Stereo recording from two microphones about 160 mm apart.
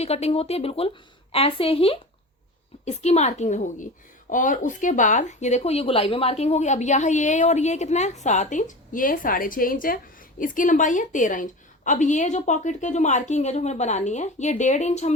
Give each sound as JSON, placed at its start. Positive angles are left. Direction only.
{"t": 0.0, "sound": "speech", "side_deg": 40}